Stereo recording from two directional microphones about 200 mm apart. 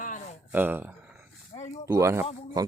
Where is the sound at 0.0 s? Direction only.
40° left (ahead or behind).